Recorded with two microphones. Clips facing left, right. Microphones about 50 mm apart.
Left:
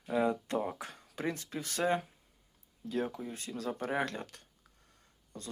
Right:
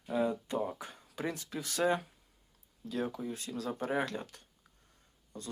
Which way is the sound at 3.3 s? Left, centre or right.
Left.